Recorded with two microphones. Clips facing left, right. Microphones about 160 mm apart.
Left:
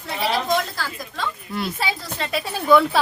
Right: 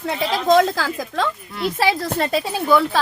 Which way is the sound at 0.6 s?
90° right.